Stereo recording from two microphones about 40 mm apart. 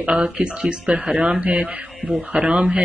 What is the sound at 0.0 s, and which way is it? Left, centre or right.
Speech, right.